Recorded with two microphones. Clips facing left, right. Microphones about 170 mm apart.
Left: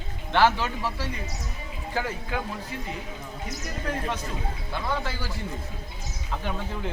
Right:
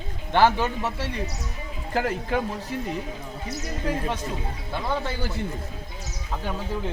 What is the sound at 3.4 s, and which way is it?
Speech, 25° right (ahead or behind).